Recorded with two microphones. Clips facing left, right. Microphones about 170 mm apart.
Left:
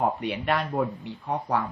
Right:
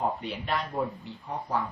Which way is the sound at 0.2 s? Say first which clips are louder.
Left 5 dB; 65° left (ahead or behind).